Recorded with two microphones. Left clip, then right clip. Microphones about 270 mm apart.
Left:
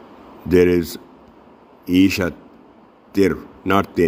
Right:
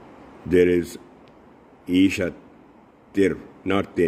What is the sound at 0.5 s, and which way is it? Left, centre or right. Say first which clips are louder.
Speech: left 3 dB; centre.